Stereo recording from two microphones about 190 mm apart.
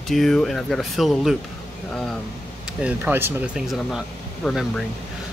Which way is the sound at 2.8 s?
10° right (ahead or behind).